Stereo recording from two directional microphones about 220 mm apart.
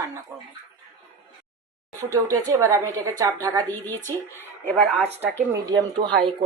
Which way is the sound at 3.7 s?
10° left (ahead or behind).